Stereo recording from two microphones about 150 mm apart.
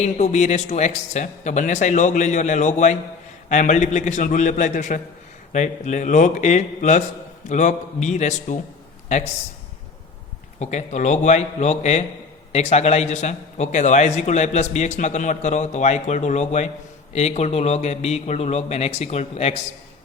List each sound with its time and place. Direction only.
0.0 s a man's voice: 50° left (ahead or behind)
10.6 s a man's voice: 50° left (ahead or behind)